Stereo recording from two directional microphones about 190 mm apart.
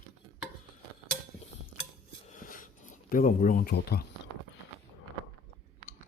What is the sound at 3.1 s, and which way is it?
Speech, 45° left (ahead or behind).